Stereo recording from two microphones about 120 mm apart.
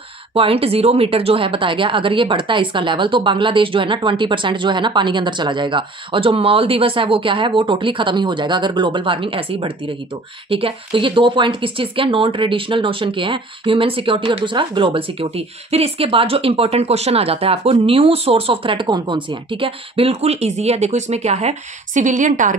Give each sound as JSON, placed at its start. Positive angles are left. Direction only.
{"t": 0.3, "sound": "speech", "side_deg": -50}